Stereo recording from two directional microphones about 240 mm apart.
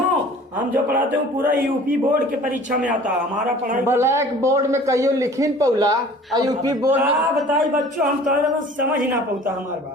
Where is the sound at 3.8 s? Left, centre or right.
Centre.